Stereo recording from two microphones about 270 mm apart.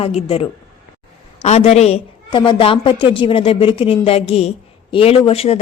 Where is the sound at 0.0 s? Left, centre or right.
Left.